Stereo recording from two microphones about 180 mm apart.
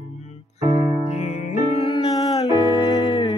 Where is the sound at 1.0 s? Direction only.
40° left (ahead or behind).